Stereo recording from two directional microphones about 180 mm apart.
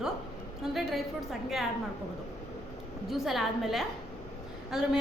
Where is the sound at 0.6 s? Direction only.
Centre (ahead or behind).